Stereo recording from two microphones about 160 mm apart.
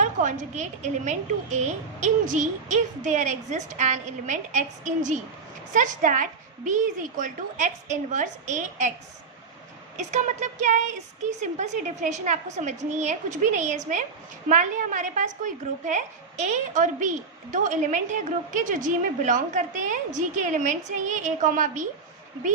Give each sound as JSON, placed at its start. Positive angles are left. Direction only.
{"t": 0.0, "sound": "a woman's voice", "side_deg": -50}
{"t": 10.0, "sound": "a woman's voice", "side_deg": -50}